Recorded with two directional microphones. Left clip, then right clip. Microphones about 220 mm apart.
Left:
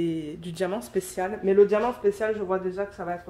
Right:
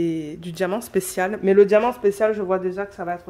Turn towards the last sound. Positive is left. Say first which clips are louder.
# right 4 dB
turn(degrees=-50)  # may be behind; listen again after turning